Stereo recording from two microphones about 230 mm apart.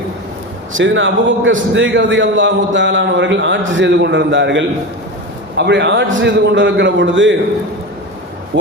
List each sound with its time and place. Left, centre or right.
0.8 s a man's voice: right